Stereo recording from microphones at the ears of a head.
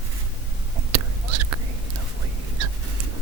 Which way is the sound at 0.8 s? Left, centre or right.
Right.